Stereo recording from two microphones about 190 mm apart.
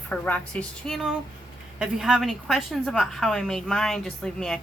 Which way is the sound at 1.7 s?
5° right (ahead or behind).